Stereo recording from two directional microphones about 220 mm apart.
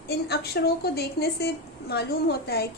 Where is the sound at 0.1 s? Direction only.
45° left (ahead or behind).